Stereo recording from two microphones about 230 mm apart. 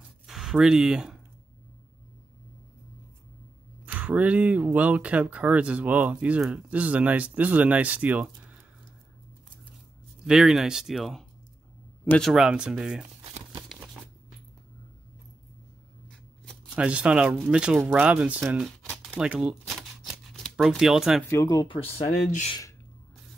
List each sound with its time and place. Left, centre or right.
0.3 s speech: centre
3.8 s speech: centre
10.2 s speech: centre
16.1 s speech: centre
21.3 s speech: centre